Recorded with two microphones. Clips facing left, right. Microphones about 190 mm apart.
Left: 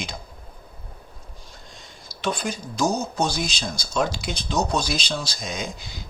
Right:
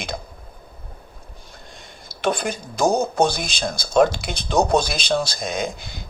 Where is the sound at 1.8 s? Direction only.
55° right (ahead or behind).